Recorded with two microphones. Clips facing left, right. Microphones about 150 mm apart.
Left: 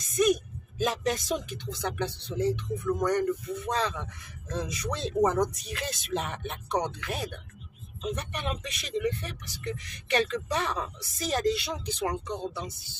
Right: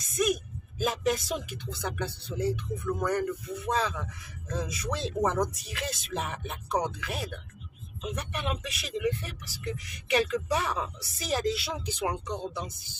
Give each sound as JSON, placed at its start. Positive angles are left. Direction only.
{"t": 0.1, "sound": "speech", "side_deg": -5}
{"t": 12.1, "sound": "speech", "side_deg": -15}